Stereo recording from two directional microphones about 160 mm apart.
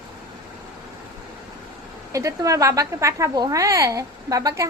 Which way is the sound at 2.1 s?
20° right (ahead or behind).